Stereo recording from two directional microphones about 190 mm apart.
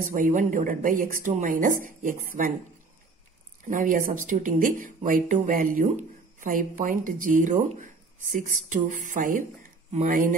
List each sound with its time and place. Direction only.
0.0 s speech: 45° right (ahead or behind)
3.6 s speech: 45° right (ahead or behind)